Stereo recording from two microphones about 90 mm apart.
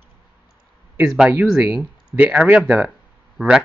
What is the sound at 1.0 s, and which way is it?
Speech, 5° right (ahead or behind).